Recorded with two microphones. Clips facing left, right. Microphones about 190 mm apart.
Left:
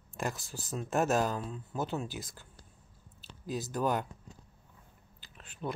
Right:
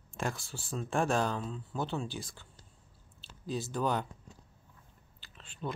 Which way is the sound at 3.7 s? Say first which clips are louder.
Left 1 dB; 5° left (ahead or behind).